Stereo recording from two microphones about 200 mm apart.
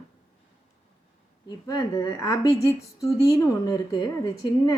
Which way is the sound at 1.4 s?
20° left (ahead or behind).